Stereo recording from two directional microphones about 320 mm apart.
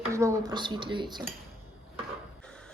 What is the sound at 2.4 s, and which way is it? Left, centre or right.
Printer, centre.